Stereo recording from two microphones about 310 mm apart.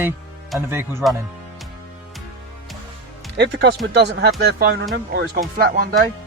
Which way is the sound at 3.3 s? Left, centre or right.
Right.